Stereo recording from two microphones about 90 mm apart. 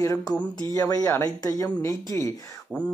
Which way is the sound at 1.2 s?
45° left (ahead or behind).